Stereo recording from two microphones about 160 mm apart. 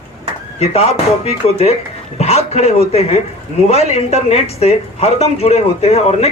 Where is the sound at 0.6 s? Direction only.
40° left (ahead or behind).